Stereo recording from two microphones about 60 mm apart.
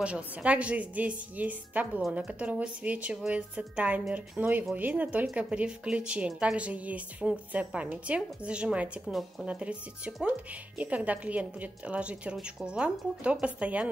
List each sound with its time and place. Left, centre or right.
0.0 s a woman's voice: right
9.0 s speech: centre
9.5 s a woman's voice: centre